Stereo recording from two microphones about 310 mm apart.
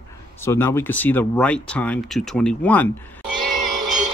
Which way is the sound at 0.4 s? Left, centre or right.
Centre.